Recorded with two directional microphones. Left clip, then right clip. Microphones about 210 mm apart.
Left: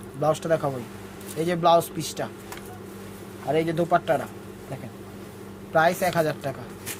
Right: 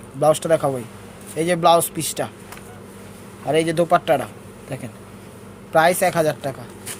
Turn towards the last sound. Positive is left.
turn(degrees=-30)  # may be behind; listen again after turning